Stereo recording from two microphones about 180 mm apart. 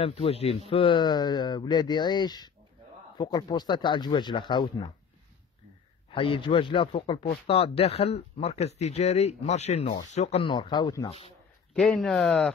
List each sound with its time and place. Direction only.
0.0 s a man's voice: 35° left (ahead or behind)
6.0 s a man's voice: 30° left (ahead or behind)
11.1 s speech: 35° left (ahead or behind)
11.7 s speech: 5° left (ahead or behind)